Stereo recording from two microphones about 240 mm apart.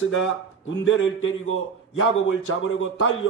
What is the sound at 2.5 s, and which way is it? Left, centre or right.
Speech, left.